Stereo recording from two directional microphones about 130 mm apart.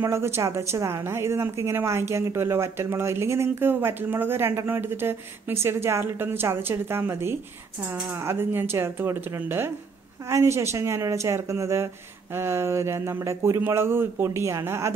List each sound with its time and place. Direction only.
0.0 s speech: 20° right (ahead or behind)